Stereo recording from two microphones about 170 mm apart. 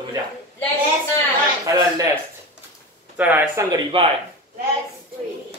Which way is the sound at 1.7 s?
20° right (ahead or behind).